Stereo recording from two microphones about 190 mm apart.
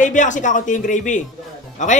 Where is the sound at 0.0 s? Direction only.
40° left (ahead or behind).